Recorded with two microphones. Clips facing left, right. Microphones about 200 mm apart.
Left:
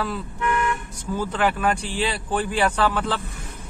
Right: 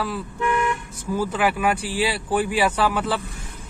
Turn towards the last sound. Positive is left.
turn(degrees=-10)  # may be behind; listen again after turning